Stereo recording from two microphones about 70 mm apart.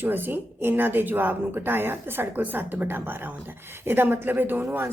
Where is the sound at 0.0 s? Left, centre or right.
Right.